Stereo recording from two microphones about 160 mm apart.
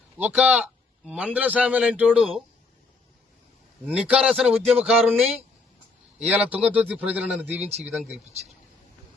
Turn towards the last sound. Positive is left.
turn(degrees=-40)  # may be behind; listen again after turning